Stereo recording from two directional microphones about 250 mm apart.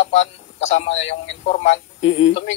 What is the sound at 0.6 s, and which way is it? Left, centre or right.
A man's voice, left.